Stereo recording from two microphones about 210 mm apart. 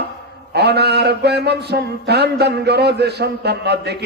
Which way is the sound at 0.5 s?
50° right (ahead or behind).